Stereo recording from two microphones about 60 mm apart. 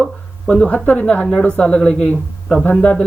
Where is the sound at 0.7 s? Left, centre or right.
Left.